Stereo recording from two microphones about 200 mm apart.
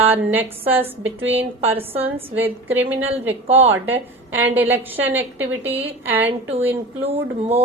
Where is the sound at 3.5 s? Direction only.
30° right (ahead or behind).